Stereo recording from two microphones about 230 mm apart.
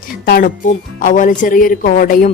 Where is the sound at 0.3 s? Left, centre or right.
Left.